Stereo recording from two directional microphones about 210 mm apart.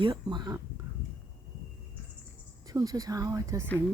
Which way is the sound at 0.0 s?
20° right (ahead or behind).